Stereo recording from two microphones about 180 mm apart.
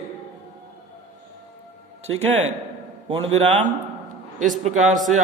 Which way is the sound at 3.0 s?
25° right (ahead or behind).